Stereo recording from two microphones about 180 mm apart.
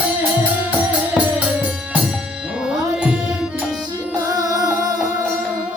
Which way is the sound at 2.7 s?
5° right (ahead or behind).